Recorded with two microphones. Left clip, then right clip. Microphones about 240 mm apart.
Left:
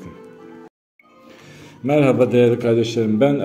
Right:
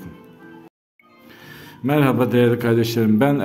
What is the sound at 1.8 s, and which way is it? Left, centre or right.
A man's voice, centre.